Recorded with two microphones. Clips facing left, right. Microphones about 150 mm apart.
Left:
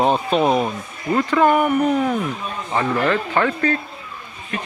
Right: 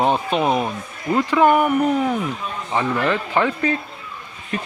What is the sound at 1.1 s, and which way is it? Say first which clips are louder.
Speech: even; 10° right (ahead or behind).